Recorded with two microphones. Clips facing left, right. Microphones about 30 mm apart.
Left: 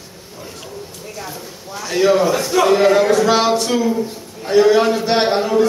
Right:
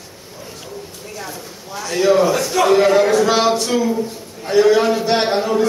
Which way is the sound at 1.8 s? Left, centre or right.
Centre.